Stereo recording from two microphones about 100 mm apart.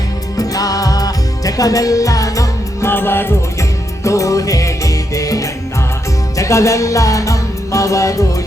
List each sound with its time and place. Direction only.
0.3 s music: 40° left (ahead or behind)
2.9 s music: 20° left (ahead or behind)